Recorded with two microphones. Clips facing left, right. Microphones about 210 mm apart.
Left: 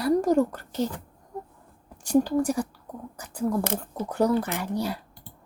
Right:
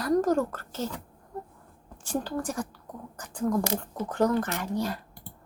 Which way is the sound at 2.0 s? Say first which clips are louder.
Left 9 dB; 10° left (ahead or behind).